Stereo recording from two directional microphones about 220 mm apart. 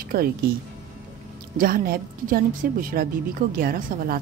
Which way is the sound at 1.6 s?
40° right (ahead or behind).